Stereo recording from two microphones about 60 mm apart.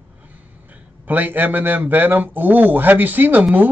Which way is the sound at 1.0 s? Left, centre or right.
Right.